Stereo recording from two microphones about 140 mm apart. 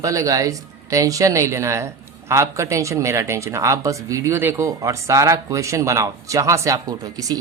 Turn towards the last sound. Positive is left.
turn(degrees=-25)  # may be behind; listen again after turning